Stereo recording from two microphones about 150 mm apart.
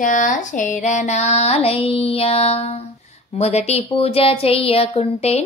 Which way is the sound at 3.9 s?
40° left (ahead or behind).